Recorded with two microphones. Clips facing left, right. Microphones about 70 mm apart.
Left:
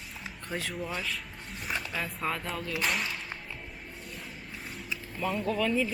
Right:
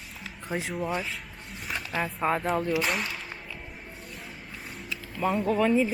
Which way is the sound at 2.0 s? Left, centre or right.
Right.